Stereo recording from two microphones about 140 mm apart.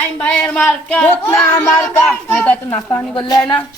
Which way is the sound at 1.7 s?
5° left (ahead or behind).